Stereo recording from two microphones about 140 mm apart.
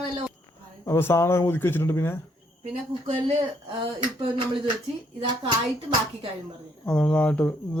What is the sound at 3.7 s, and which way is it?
Speech, 35° right (ahead or behind).